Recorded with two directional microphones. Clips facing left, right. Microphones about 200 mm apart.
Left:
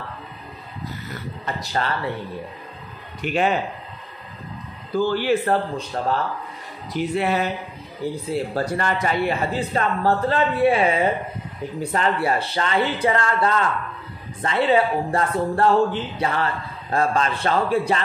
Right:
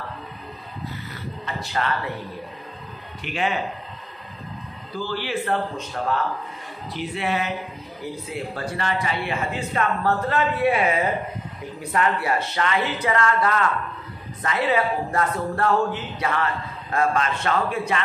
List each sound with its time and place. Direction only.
1.4 s speech: 35° left (ahead or behind)
3.2 s speech: 45° left (ahead or behind)
5.0 s speech: 45° left (ahead or behind)